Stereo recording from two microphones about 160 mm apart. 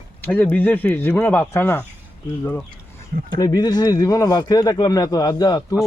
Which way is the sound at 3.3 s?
25° left (ahead or behind).